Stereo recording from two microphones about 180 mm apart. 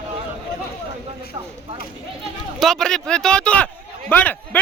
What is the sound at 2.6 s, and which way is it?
A man's voice, centre (ahead or behind).